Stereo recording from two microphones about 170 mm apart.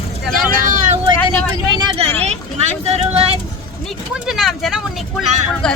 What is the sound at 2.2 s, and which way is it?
Vehicle, 40° right (ahead or behind).